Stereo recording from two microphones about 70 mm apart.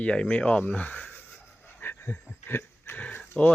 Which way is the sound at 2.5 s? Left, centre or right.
Left.